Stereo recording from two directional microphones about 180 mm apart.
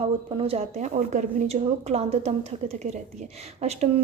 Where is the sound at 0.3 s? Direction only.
30° right (ahead or behind).